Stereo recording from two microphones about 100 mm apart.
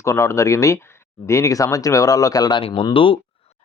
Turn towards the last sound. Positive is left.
turn(degrees=60)  # may be behind; listen again after turning